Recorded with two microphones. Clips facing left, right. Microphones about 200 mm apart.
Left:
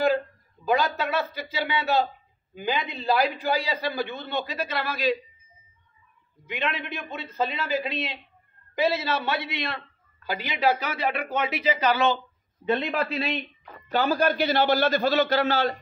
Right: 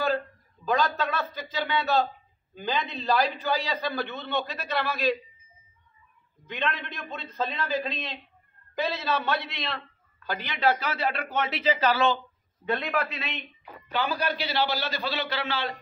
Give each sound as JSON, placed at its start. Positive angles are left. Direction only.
{"t": 0.7, "sound": "speech", "side_deg": 10}
{"t": 6.4, "sound": "a man's voice", "side_deg": 10}